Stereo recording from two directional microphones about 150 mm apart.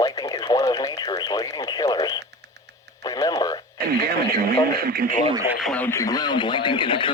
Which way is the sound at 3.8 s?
90° right.